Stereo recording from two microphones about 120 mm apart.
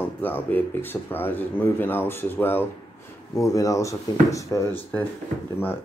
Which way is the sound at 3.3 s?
25° left (ahead or behind).